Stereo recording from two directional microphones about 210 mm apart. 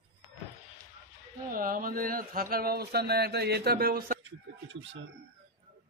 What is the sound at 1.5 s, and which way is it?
Speech, 40° right (ahead or behind).